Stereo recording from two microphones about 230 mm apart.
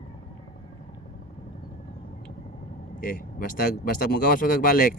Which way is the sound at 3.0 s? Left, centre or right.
Left.